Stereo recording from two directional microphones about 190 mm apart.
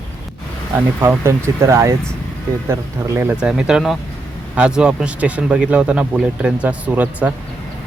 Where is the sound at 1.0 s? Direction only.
15° right (ahead or behind).